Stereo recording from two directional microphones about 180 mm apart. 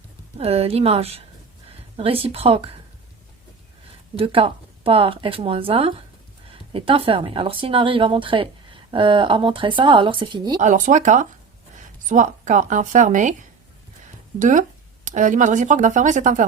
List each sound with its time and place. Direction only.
0.3 s speech: 35° right (ahead or behind)
4.2 s speech: 30° right (ahead or behind)
10.6 s speech: 45° right (ahead or behind)
14.3 s speech: 45° right (ahead or behind)